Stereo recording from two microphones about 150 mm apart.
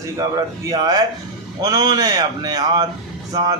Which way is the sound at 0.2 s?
20° right (ahead or behind).